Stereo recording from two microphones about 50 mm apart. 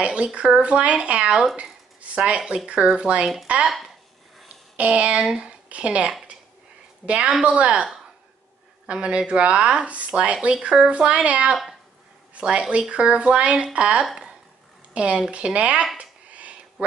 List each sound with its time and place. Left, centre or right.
0.0 s speech: right
1.6 s a sound: right
2.4 s speech: centre
4.7 s speech: right
8.8 s a woman's voice: right
16.0 s a sound: right